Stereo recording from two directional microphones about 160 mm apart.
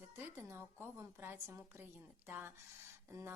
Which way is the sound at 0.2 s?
15° right (ahead or behind).